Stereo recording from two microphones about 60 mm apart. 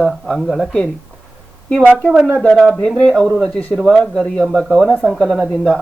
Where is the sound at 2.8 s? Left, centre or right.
Centre.